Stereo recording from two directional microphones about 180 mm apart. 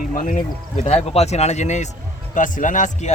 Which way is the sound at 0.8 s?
35° left (ahead or behind).